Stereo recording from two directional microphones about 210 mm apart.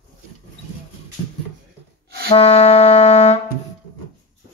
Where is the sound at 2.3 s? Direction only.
30° left (ahead or behind).